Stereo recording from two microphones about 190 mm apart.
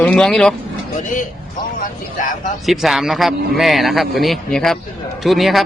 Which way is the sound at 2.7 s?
Centre (ahead or behind).